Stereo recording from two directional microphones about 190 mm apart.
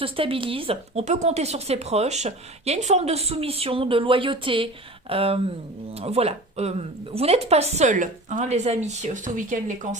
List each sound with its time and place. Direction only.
0.0 s speech: 30° right (ahead or behind)